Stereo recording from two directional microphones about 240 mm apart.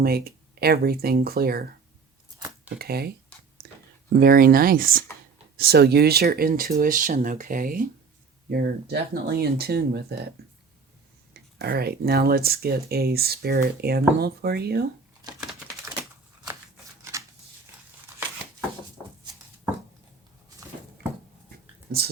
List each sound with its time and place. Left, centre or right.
0.0 s speech: right
2.7 s speech: right
3.6 s a sound: right
4.1 s speech: right
11.3 s speech: right
15.2 s typing: centre
17.0 s shuffling cards: centre
21.5 s a sound: right